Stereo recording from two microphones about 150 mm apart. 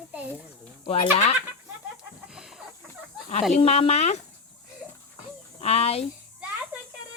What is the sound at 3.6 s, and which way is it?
Speech, 40° left (ahead or behind).